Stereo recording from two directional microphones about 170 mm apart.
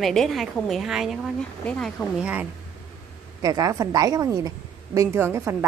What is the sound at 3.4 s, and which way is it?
A woman's voice, 20° right (ahead or behind).